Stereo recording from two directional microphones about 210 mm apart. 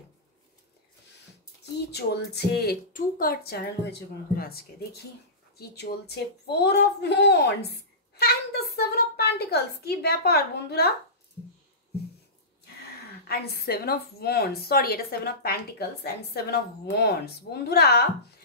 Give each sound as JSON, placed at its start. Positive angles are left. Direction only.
{"t": 1.6, "sound": "speech", "side_deg": 50}
{"t": 13.3, "sound": "speech", "side_deg": 45}